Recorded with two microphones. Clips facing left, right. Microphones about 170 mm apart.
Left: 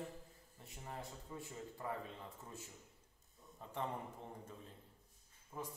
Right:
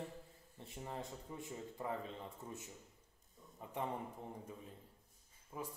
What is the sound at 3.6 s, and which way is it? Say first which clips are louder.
Speech: right 2 dB; 15° right (ahead or behind).